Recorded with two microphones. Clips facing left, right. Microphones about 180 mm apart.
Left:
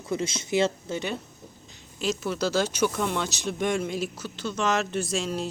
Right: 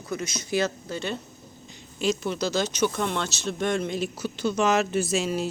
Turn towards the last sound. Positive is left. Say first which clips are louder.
# right 3 dB
turn(degrees=-5)  # may be behind; listen again after turning